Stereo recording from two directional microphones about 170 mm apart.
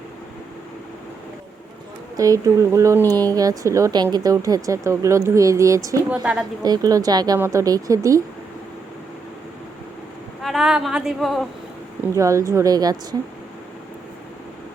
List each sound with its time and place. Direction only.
2.1 s speech: 20° right (ahead or behind)
10.4 s a woman's voice: centre (ahead or behind)
12.1 s speech: 20° right (ahead or behind)